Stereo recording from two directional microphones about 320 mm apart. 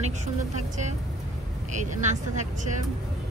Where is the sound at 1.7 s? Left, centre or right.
Right.